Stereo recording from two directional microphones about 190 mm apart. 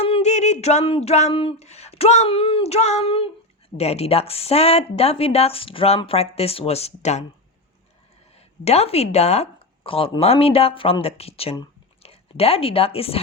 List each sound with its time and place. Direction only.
0.0 s a sound: 35° left (ahead or behind)
3.8 s speech: 35° left (ahead or behind)
8.4 s speech: 35° left (ahead or behind)